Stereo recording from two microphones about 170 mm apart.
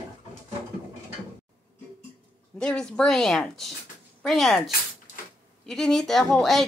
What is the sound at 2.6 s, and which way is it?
Speech, 5° left (ahead or behind).